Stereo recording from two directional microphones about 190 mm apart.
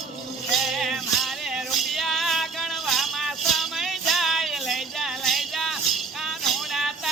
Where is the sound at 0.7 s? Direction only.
Centre (ahead or behind).